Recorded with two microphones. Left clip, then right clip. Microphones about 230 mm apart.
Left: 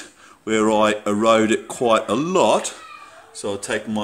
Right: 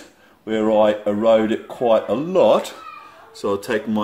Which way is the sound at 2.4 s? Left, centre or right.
Centre.